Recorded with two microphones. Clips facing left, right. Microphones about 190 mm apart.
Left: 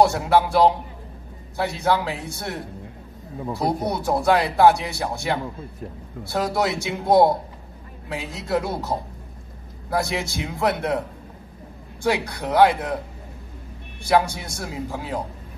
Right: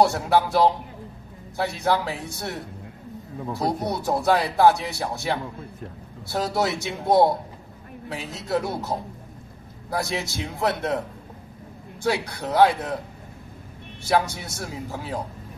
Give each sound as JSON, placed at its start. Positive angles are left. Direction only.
{"t": 0.0, "sound": "a man's voice", "side_deg": 15}
{"t": 3.4, "sound": "a man's voice", "side_deg": 15}
{"t": 9.9, "sound": "a man's voice", "side_deg": 15}
{"t": 12.0, "sound": "a man's voice", "side_deg": 15}
{"t": 14.0, "sound": "a man's voice", "side_deg": 15}